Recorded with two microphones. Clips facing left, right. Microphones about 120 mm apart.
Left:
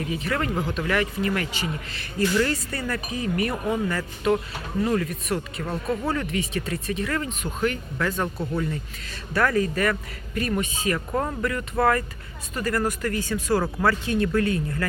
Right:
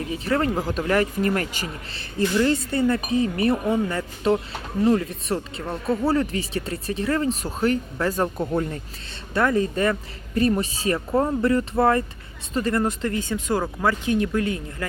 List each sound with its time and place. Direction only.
0.1 s speech: 30° right (ahead or behind)
9.3 s speech: 25° right (ahead or behind)